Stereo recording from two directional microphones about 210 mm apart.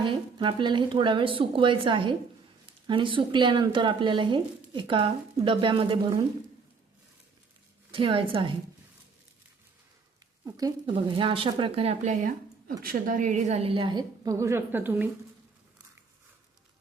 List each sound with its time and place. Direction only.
0.0 s speech: 25° right (ahead or behind)
7.9 s speech: 25° right (ahead or behind)
10.4 s speech: 20° right (ahead or behind)